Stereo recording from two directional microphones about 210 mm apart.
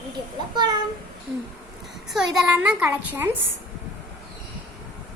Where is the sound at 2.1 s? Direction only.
Centre (ahead or behind).